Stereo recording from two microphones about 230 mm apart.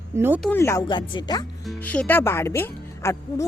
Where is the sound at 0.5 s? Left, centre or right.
Centre.